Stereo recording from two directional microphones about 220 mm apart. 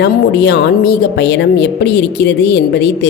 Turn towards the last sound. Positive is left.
turn(degrees=50)  # may be behind; listen again after turning